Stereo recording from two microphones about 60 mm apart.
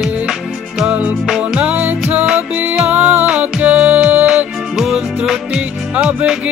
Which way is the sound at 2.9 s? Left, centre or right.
Right.